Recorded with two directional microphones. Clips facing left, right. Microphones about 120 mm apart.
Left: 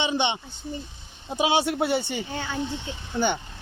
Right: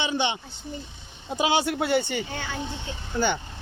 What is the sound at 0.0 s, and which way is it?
Speech, 25° left (ahead or behind).